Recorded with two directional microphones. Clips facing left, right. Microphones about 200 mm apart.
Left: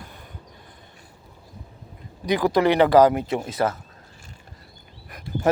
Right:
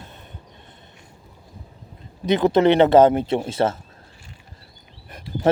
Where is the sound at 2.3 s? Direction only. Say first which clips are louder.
Right 3 dB; 25° right (ahead or behind).